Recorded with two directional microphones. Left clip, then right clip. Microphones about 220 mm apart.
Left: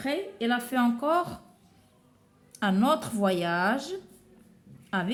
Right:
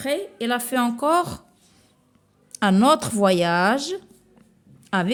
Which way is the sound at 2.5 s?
50° right (ahead or behind).